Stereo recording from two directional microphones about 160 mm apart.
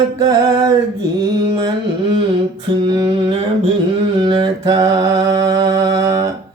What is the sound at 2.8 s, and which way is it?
Mantra, 30° right (ahead or behind).